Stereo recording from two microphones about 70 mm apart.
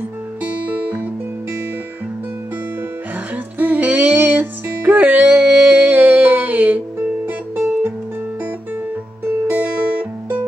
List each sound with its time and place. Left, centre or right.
0.4 s music: right
3.5 s music: right
9.5 s music: right